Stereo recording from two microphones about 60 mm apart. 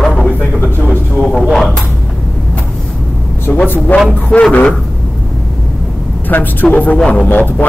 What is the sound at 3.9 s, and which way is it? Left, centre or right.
Speech, left.